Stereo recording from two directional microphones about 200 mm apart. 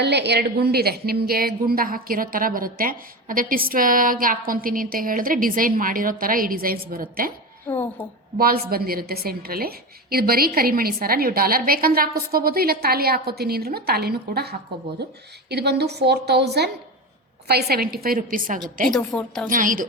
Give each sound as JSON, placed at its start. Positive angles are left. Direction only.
{"t": 0.0, "sound": "a woman's voice", "side_deg": -55}
{"t": 7.7, "sound": "a woman's voice", "side_deg": 5}
{"t": 8.4, "sound": "a woman's voice", "side_deg": -50}
{"t": 18.9, "sound": "a woman's voice", "side_deg": 5}
{"t": 19.5, "sound": "a woman's voice", "side_deg": -40}